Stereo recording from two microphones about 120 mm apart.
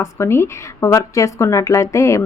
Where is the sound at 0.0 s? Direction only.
20° left (ahead or behind).